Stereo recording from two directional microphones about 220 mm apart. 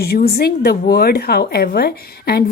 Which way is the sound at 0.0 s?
45° left (ahead or behind).